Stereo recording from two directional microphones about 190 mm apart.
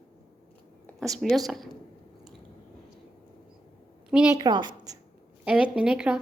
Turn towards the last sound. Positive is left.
turn(degrees=-5)  # may be behind; listen again after turning